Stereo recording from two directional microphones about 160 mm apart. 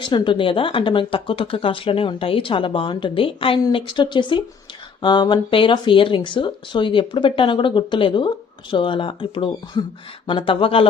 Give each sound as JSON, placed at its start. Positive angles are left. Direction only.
{"t": 0.0, "sound": "speech", "side_deg": 30}